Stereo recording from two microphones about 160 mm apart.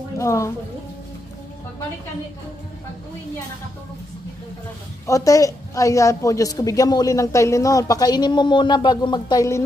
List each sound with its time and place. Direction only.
0.2 s a woman's voice: 20° left (ahead or behind)
5.0 s a woman's voice: 20° left (ahead or behind)